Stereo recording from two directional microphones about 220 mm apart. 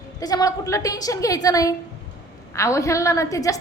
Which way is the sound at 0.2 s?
15° left (ahead or behind).